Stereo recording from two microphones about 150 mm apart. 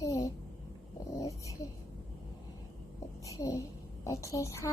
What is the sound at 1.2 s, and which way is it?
Dog, 20° left (ahead or behind).